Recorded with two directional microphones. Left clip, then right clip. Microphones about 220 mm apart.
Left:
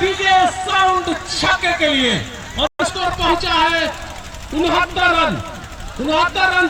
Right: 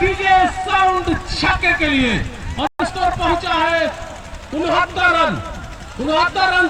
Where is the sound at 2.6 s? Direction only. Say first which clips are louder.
Left 1 dB; 45° left (ahead or behind).